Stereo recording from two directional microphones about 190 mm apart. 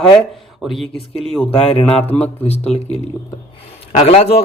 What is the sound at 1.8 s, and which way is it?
Speech, 10° left (ahead or behind).